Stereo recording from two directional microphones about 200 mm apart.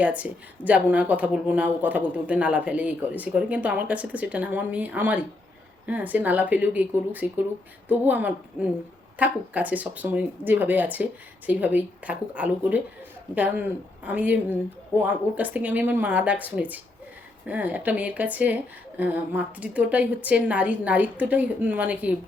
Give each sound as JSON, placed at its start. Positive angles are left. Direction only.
{"t": 0.0, "sound": "a woman's voice", "side_deg": -5}